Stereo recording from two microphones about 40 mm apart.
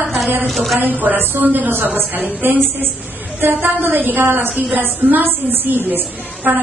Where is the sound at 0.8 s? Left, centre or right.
Right.